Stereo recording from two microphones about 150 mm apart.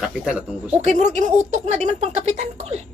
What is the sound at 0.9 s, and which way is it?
Speech, 50° right (ahead or behind).